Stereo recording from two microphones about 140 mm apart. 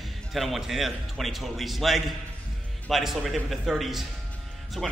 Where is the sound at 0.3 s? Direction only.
Centre (ahead or behind).